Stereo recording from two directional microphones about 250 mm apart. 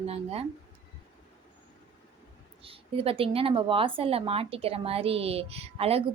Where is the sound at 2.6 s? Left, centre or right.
Right.